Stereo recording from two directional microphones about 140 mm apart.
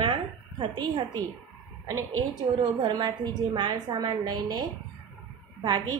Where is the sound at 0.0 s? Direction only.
35° right (ahead or behind).